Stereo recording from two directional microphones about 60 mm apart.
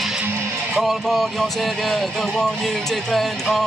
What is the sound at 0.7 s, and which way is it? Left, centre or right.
Speech, centre.